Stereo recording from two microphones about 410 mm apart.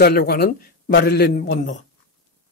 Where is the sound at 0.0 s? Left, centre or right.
Left.